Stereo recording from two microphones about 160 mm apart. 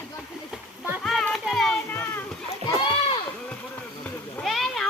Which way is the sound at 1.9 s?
10° left (ahead or behind).